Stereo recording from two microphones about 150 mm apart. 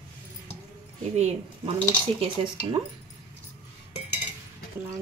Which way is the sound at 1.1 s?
45° right (ahead or behind).